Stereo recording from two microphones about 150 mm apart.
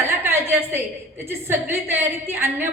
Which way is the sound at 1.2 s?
15° right (ahead or behind).